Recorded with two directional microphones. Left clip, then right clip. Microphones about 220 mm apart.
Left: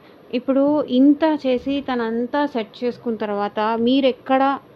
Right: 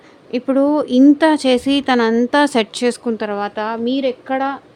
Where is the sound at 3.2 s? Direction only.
10° right (ahead or behind); by 4.6 s 10° left (ahead or behind).